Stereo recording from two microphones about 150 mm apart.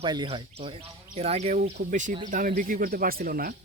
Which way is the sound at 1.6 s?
60° right (ahead or behind).